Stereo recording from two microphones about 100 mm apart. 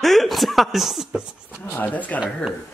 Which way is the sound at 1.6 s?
20° left (ahead or behind).